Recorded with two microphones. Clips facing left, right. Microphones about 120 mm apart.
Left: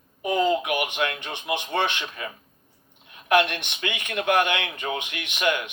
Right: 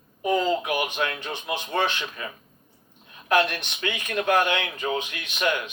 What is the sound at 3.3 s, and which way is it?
Speech, 35° right (ahead or behind).